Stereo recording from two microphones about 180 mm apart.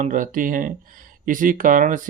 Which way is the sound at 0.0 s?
45° right (ahead or behind).